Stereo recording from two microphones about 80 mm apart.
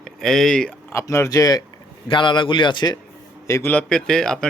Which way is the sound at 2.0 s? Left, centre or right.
Left.